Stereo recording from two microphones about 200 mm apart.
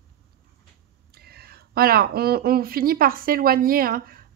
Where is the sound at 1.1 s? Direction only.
50° right (ahead or behind).